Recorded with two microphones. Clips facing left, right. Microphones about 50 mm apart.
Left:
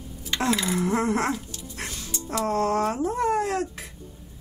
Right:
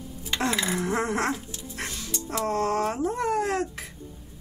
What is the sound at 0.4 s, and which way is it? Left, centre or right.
Speech, centre.